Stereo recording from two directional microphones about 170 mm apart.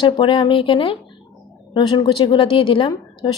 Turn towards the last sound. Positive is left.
turn(degrees=30)  # may be behind; listen again after turning